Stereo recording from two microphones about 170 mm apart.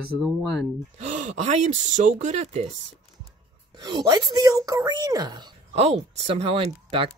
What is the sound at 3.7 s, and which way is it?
Speech, 25° right (ahead or behind).